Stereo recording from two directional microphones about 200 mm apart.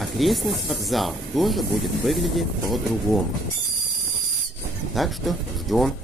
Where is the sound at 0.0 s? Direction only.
Centre (ahead or behind).